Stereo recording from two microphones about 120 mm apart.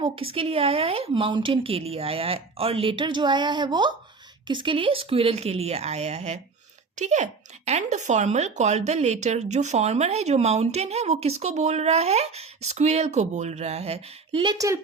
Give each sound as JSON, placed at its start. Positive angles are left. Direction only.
{"t": 0.0, "sound": "a woman's voice", "side_deg": -50}
{"t": 6.9, "sound": "speech", "side_deg": -75}
{"t": 14.4, "sound": "speech", "side_deg": -35}